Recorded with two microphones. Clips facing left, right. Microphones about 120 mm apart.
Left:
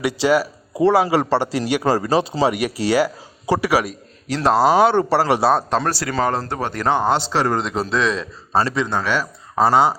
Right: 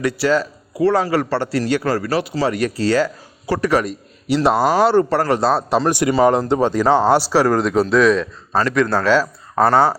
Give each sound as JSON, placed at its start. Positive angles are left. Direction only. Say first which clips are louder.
{"t": 0.0, "sound": "speech", "louder": "even", "side_deg": 15}
{"t": 5.9, "sound": "speech", "louder": "right 6 dB", "side_deg": -20}
{"t": 7.3, "sound": "speech", "louder": "right 5 dB", "side_deg": 0}
{"t": 8.5, "sound": "a man's voice", "louder": "right 2 dB", "side_deg": 25}
{"t": 9.0, "sound": "speech", "louder": "right 6 dB", "side_deg": 10}